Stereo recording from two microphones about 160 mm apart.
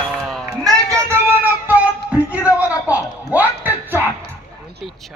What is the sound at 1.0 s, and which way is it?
Music, 10° right (ahead or behind).